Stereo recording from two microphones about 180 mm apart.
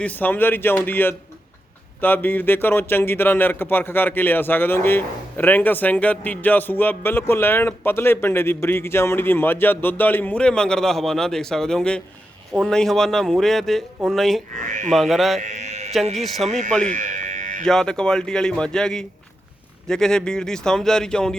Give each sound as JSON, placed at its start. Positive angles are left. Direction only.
{"t": 0.0, "sound": "a man's voice", "side_deg": 10}
{"t": 14.6, "sound": "speech", "side_deg": -45}
{"t": 14.8, "sound": "speech", "side_deg": 0}
{"t": 15.4, "sound": "mantra", "side_deg": -40}
{"t": 16.1, "sound": "speech", "side_deg": 0}
{"t": 16.5, "sound": "speech", "side_deg": -40}
{"t": 16.8, "sound": "a sound", "side_deg": -45}
{"t": 17.7, "sound": "speech", "side_deg": 5}